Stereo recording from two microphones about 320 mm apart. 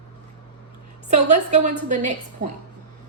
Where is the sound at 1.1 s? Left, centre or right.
Right.